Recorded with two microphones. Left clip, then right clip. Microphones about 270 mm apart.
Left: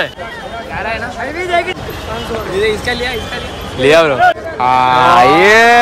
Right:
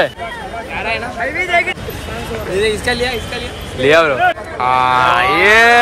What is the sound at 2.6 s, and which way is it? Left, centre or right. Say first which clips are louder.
Speech: even; right.